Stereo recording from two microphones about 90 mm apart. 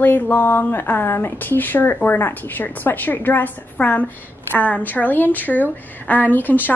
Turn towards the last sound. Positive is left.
turn(degrees=20)  # may be behind; listen again after turning